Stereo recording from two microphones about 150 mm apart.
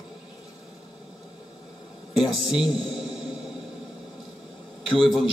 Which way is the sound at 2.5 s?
Centre (ahead or behind).